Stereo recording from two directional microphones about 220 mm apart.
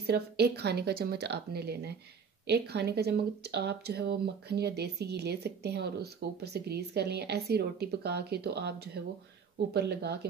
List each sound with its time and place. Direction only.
0.0 s speech: 45° right (ahead or behind)